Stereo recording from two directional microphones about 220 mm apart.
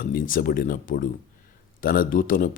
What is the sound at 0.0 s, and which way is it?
Speech, 40° left (ahead or behind).